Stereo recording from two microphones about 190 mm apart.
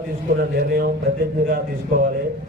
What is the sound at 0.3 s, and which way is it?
A man's voice, 50° right (ahead or behind).